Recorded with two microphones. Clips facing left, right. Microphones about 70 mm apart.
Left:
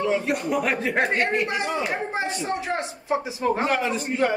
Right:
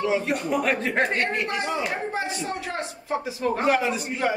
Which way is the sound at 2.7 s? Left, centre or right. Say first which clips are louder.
Left 3 dB; centre.